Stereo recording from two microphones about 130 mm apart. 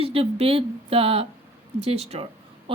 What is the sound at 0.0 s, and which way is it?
Speech, 50° right (ahead or behind).